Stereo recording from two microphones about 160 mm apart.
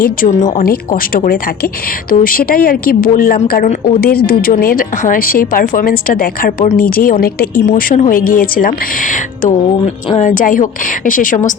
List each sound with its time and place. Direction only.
0.0 s a woman's voice: 55° left (ahead or behind)
9.6 s a woman's voice: 40° left (ahead or behind); by 11.5 s 55° left (ahead or behind)